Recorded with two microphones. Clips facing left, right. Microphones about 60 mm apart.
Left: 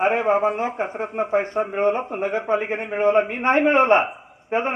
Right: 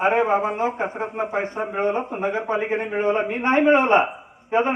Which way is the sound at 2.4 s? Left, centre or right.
Left.